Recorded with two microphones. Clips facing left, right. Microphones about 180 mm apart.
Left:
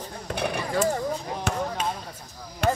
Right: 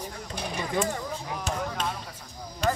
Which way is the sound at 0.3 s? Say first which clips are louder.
Left 9 dB; 65° left (ahead or behind).